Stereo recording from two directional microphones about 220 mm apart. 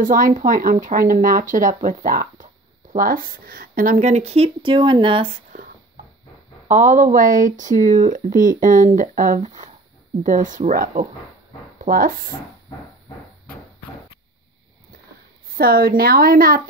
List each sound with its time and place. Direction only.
0.0 s speech: 40° right (ahead or behind); by 5.3 s 25° right (ahead or behind)
6.7 s speech: 35° right (ahead or behind)
15.5 s speech: 40° right (ahead or behind)